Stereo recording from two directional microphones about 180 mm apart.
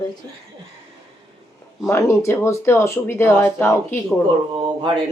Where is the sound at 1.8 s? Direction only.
15° left (ahead or behind).